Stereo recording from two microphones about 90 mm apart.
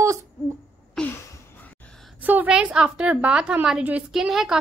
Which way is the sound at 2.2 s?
20° right (ahead or behind).